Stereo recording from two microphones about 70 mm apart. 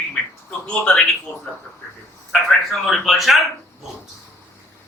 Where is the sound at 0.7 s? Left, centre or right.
Centre.